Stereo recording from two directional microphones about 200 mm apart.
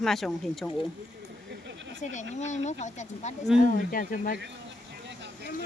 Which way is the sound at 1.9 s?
35° left (ahead or behind).